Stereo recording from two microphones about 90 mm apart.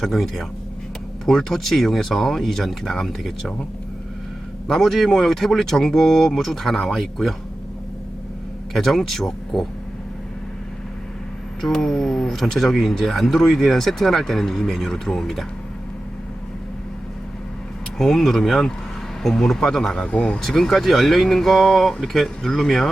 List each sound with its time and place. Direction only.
0.0 s speech: 5° left (ahead or behind)
4.7 s speech: centre (ahead or behind)
8.7 s speech: centre (ahead or behind)
11.6 s speech: 5° left (ahead or behind)
17.9 s speech: 5° left (ahead or behind)